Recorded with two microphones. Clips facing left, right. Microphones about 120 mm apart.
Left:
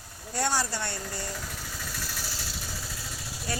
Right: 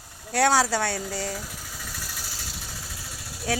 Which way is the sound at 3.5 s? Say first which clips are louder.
Right 7 dB; 85° right.